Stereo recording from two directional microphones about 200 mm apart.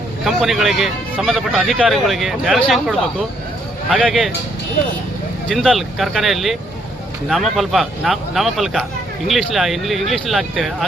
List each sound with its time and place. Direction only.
0.3 s speech: centre (ahead or behind)
3.9 s speech: 5° right (ahead or behind)
5.5 s speech: centre (ahead or behind)